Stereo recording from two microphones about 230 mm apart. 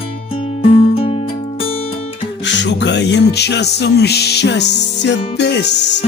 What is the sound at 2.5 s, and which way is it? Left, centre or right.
Music, left.